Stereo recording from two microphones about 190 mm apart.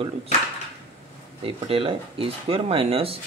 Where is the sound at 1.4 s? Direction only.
30° right (ahead or behind).